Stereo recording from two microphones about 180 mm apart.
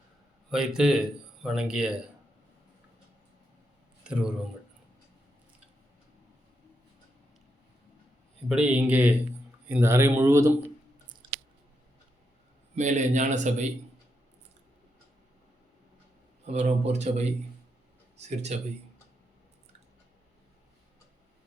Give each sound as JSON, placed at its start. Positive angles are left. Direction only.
{"t": 0.5, "sound": "a man's voice", "side_deg": -5}
{"t": 4.0, "sound": "speech", "side_deg": -5}
{"t": 8.4, "sound": "speech", "side_deg": -5}
{"t": 11.0, "sound": "chewing", "side_deg": -25}
{"t": 12.7, "sound": "a man's voice", "side_deg": -40}
{"t": 16.5, "sound": "a man's voice", "side_deg": -40}